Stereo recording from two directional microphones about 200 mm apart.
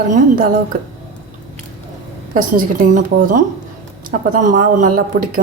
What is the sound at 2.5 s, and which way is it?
A woman's voice, 40° right (ahead or behind).